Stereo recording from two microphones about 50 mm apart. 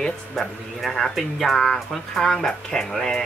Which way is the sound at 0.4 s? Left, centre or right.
Centre.